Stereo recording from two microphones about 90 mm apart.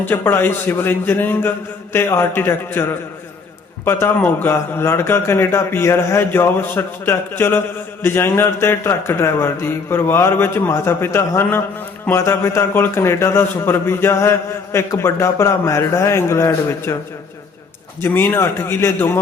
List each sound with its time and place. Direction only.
0.0 s a man's voice: 25° left (ahead or behind)
18.0 s a man's voice: 25° left (ahead or behind)